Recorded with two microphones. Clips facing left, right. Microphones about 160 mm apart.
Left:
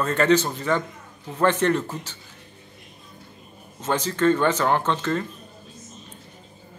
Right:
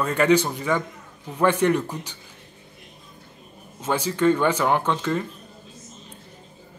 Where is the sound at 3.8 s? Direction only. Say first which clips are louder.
Even; 10° right (ahead or behind).